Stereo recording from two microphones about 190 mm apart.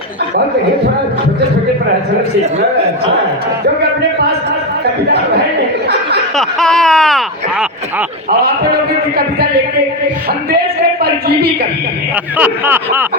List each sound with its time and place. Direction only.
6.3 s a sound: centre (ahead or behind)
8.3 s a man's voice: 55° right (ahead or behind)
12.4 s speech: 10° right (ahead or behind)